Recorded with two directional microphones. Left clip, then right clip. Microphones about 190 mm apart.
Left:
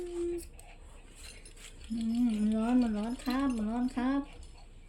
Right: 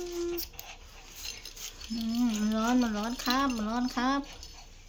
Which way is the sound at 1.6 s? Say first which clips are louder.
Right 8 dB; 25° right (ahead or behind).